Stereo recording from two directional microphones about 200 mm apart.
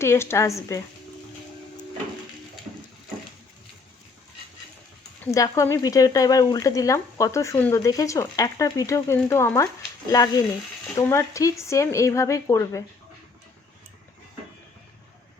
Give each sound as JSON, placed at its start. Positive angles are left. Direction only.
{"t": 0.0, "sound": "speech", "side_deg": 10}
{"t": 5.2, "sound": "speech", "side_deg": 15}